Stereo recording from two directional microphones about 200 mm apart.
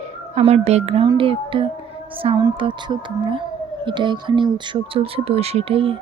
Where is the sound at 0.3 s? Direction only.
30° right (ahead or behind).